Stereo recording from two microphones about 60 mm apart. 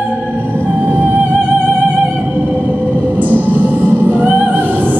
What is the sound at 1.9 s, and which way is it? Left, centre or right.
Music, centre.